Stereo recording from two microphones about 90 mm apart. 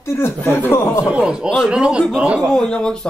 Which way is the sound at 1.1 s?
15° right (ahead or behind).